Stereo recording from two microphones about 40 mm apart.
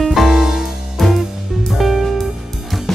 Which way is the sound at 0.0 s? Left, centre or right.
Centre.